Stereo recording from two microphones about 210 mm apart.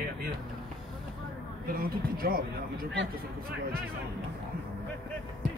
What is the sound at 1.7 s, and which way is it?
Speech, 45° right (ahead or behind).